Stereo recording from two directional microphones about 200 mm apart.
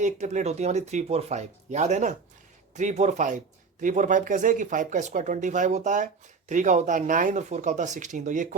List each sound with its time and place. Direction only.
0.0 s speech: 35° right (ahead or behind)